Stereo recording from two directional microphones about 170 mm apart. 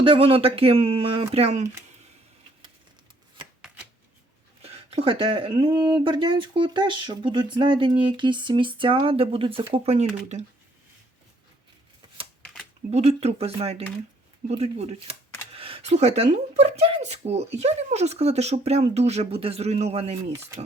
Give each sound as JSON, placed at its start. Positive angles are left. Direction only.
{"t": 0.0, "sound": "a woman's voice", "side_deg": -30}
{"t": 4.6, "sound": "a woman's voice", "side_deg": -35}
{"t": 12.9, "sound": "a woman's voice", "side_deg": -40}